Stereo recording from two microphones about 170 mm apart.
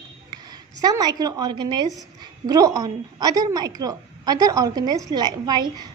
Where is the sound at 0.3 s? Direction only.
25° right (ahead or behind).